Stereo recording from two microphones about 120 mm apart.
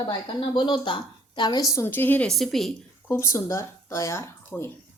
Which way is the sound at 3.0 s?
20° left (ahead or behind).